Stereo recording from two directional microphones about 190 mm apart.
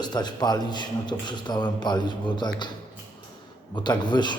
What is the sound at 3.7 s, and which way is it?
Speech, 25° left (ahead or behind).